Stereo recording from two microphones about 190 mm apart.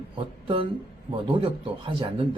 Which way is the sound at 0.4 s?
25° right (ahead or behind).